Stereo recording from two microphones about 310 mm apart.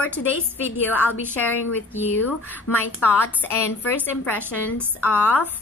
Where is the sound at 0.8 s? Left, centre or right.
Centre.